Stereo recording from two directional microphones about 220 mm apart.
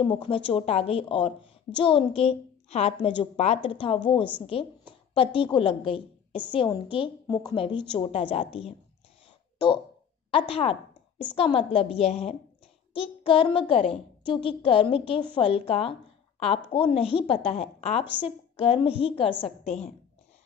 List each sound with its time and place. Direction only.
0.0 s a woman's voice: 25° left (ahead or behind)
10.5 s a woman's voice: 25° left (ahead or behind)